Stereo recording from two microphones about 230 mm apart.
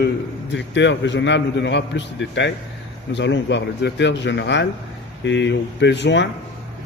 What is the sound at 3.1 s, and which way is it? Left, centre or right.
A man's voice, left.